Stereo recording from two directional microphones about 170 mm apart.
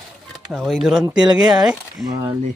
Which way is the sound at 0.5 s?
Centre (ahead or behind).